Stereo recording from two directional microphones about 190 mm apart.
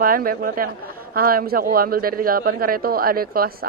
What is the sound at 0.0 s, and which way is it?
A man's voice, 50° right (ahead or behind).